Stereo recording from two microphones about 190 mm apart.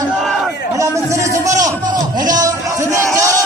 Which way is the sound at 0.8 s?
15° right (ahead or behind).